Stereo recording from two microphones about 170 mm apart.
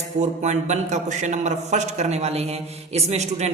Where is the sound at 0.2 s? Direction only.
45° right (ahead or behind).